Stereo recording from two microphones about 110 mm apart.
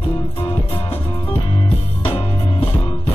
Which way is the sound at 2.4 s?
25° left (ahead or behind).